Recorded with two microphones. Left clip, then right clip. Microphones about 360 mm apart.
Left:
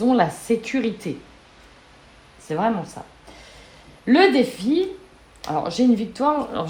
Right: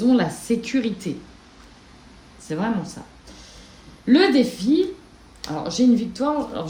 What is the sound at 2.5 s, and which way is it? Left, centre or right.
Speech, centre.